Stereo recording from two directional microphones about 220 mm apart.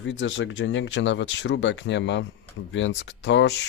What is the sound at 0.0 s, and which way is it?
Speech, 55° left (ahead or behind).